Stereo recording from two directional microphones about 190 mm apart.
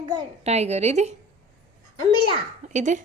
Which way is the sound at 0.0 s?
35° right (ahead or behind).